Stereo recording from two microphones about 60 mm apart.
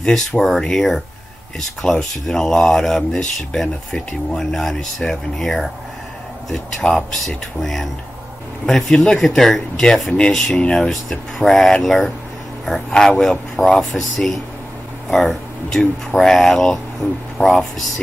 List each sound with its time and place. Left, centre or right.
0.0 s speech: centre
10.5 s speech: centre
10.8 s speech: centre